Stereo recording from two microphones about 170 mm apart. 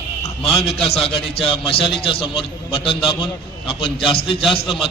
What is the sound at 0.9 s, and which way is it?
A man's voice, 35° left (ahead or behind).